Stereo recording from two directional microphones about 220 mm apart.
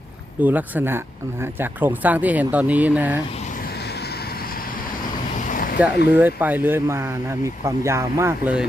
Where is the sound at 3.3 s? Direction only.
35° left (ahead or behind).